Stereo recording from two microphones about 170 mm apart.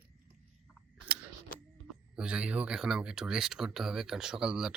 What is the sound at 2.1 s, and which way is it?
Speech, 5° right (ahead or behind).